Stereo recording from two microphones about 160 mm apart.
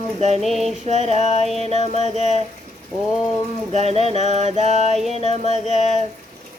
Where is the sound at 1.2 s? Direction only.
45° left (ahead or behind).